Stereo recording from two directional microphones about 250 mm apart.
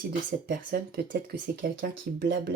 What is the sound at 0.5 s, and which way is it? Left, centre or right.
Speech, right.